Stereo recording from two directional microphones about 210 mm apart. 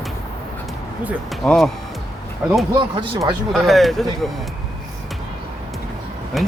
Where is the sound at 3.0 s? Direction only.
20° right (ahead or behind).